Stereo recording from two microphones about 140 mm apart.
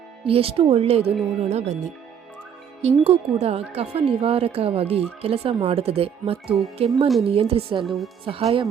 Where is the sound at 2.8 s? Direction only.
45° right (ahead or behind).